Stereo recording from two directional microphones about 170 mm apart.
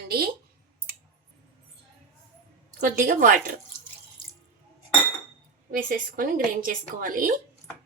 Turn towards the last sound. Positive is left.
turn(degrees=-55)  # may be behind; listen again after turning